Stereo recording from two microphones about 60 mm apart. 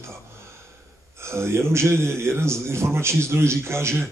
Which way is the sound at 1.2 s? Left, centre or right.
Right.